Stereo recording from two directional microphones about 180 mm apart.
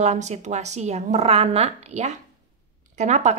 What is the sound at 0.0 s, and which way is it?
Speech, 40° right (ahead or behind).